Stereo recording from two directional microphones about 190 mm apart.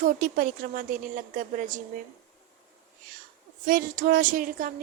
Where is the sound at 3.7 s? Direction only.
50° right (ahead or behind).